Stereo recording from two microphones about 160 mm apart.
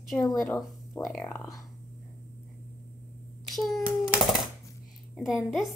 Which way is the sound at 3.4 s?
Centre (ahead or behind).